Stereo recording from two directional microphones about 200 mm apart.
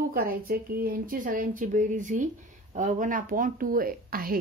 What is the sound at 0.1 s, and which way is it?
Speech, 50° right (ahead or behind).